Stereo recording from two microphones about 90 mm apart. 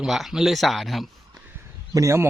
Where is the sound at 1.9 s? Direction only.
35° right (ahead or behind).